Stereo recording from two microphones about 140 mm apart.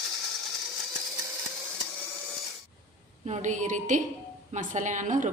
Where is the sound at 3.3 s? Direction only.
60° right (ahead or behind).